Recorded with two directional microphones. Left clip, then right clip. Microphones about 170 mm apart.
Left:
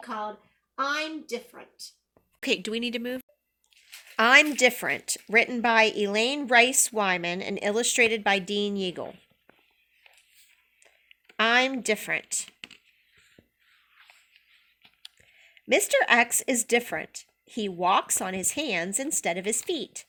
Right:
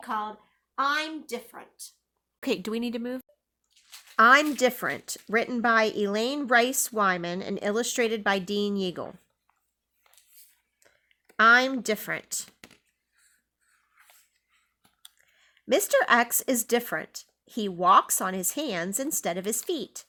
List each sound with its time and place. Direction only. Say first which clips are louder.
0.0 s a woman's voice: right 2 dB; 15° right (ahead or behind)
2.4 s a woman's voice: left 2 dB; 45° right (ahead or behind)
11.3 s a woman's voice: right 3 dB; 40° right (ahead or behind)
12.5 s a sound: left 7 dB; 5° left (ahead or behind)
15.0 s a woman's voice: left 5 dB; 35° right (ahead or behind)